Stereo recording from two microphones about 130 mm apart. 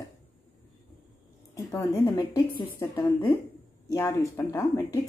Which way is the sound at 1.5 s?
25° left (ahead or behind).